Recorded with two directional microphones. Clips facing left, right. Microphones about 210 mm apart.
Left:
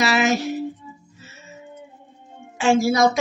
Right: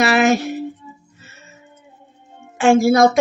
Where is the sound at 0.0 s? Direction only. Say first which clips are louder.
Right 4 dB; 55° right (ahead or behind).